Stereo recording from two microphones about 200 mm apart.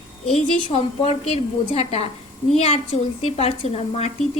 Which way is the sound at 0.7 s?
30° left (ahead or behind).